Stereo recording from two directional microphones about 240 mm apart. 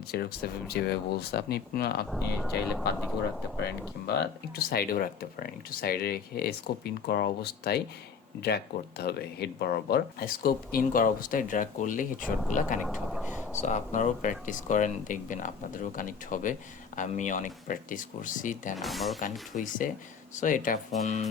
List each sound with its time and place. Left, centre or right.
0.1 s speech: left
2.0 s speech: centre
3.6 s speech: left
12.2 s speech: centre
12.5 s speech: left
12.8 s speech: centre
13.6 s speech: left
18.8 s speech: centre
19.2 s speech: left